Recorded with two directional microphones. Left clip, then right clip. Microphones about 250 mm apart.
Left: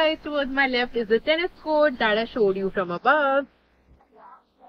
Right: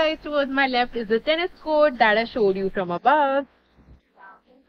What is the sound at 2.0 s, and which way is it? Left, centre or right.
A woman's voice, right.